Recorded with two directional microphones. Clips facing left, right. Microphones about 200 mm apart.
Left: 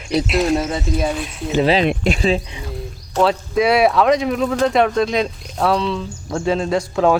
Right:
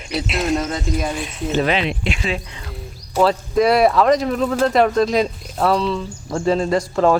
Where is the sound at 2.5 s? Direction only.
10° left (ahead or behind).